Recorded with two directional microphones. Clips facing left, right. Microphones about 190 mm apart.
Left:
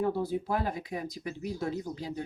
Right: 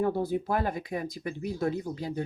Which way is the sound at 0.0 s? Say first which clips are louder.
Right 2 dB; 55° right (ahead or behind).